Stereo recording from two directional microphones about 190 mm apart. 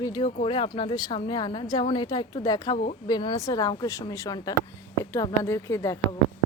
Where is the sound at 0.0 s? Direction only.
20° left (ahead or behind).